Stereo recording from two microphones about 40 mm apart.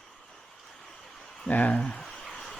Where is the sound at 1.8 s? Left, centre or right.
Left.